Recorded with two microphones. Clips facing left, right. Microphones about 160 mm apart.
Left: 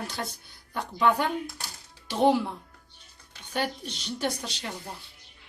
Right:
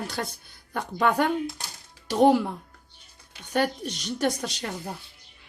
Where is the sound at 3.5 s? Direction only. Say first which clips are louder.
Right 5 dB; 45° right (ahead or behind).